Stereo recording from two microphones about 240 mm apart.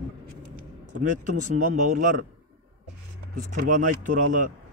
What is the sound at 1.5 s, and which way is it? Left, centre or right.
Speech, right.